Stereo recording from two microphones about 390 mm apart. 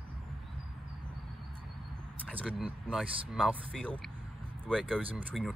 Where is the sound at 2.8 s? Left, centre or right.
Centre.